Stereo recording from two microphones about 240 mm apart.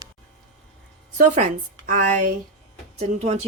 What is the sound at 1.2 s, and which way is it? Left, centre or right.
Speech, right.